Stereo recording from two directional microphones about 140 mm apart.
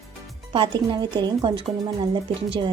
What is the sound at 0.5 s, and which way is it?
A woman's voice, 35° right (ahead or behind).